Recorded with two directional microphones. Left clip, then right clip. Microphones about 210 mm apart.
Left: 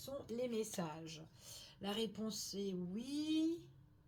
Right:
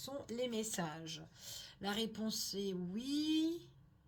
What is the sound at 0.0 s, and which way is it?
A woman's voice, 35° right (ahead or behind).